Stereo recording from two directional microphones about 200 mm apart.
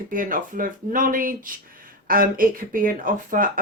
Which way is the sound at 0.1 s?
40° right (ahead or behind).